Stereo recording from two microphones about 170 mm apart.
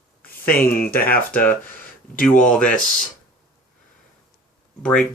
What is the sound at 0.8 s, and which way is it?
Speech, 60° left (ahead or behind).